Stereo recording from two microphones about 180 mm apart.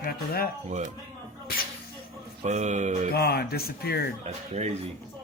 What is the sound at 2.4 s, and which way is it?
Speech, 40° right (ahead or behind).